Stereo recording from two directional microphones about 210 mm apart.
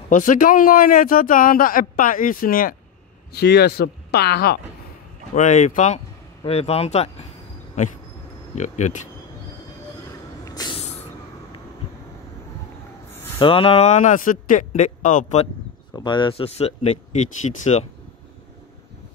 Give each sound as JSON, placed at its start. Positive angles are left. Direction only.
{"t": 0.1, "sound": "a man's voice", "side_deg": 40}
{"t": 5.3, "sound": "a man's voice", "side_deg": 35}
{"t": 8.5, "sound": "a man's voice", "side_deg": 35}
{"t": 10.4, "sound": "a sound", "side_deg": 20}
{"t": 13.4, "sound": "a man's voice", "side_deg": 25}
{"t": 15.9, "sound": "speech", "side_deg": 20}